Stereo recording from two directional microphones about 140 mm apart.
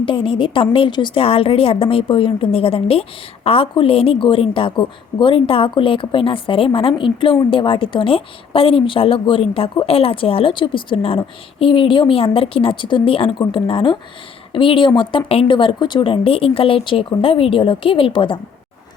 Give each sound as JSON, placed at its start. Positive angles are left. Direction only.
{"t": 0.0, "sound": "a woman's voice", "side_deg": 40}